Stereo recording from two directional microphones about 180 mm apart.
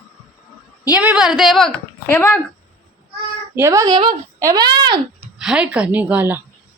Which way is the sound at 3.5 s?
15° right (ahead or behind).